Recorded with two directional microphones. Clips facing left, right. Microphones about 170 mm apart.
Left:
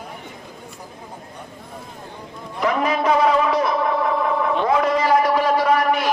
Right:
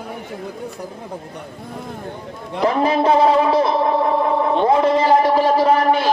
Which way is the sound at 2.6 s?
30° right (ahead or behind).